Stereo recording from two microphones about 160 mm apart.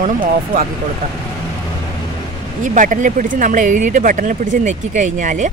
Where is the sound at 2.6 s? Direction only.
55° right (ahead or behind).